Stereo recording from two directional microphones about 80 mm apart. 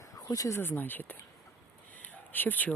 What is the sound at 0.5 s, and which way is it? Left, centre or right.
Speech, left.